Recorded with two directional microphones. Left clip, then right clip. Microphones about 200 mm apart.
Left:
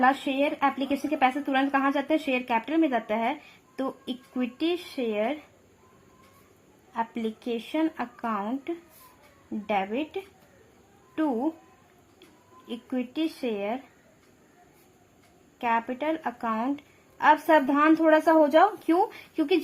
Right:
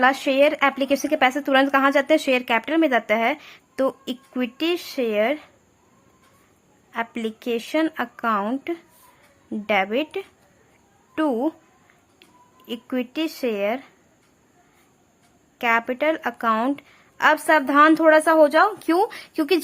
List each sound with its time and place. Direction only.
0.0 s speech: 25° right (ahead or behind)
6.9 s speech: 20° right (ahead or behind)
12.6 s speech: 20° right (ahead or behind)
15.5 s speech: 20° right (ahead or behind)